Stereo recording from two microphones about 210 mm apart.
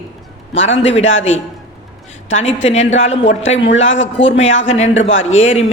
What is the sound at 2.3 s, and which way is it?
Speech, 65° left (ahead or behind).